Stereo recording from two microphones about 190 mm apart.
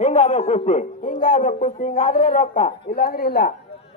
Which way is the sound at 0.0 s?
40° left (ahead or behind).